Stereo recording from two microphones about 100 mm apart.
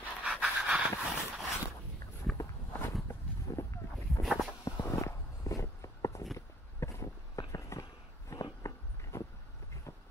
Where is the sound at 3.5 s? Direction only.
30° left (ahead or behind).